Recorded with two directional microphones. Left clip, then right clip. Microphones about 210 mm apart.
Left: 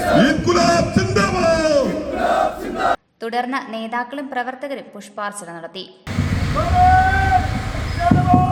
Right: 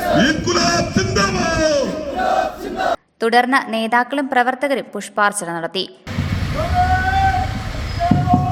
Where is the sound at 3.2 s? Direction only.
30° right (ahead or behind).